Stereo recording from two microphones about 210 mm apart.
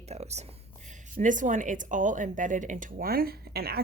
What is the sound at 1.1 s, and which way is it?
Speech, 40° right (ahead or behind).